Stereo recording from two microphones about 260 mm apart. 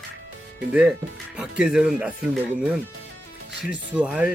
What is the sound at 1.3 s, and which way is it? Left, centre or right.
Speech, centre.